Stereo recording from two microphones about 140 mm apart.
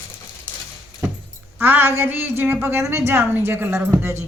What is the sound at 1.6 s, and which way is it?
Speech, 15° right (ahead or behind).